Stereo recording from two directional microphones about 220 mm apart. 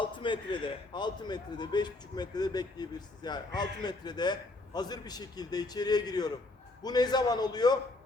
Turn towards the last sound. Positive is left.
turn(degrees=20)  # may be behind; listen again after turning